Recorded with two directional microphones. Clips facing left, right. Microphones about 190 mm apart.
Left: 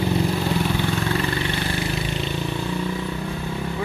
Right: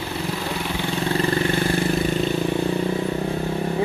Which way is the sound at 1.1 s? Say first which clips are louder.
Right 4 dB; 40° right (ahead or behind).